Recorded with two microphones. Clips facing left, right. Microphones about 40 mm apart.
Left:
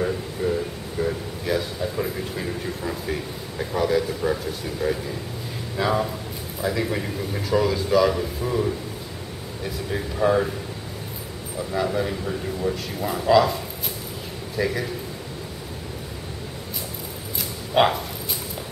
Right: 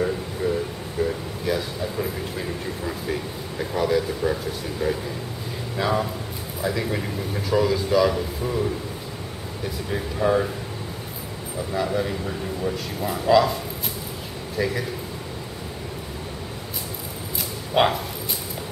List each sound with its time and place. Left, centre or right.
0.4 s a sound: centre
0.9 s a man's voice: centre
9.8 s a man's voice: centre
11.7 s a man's voice: centre
17.7 s speech: centre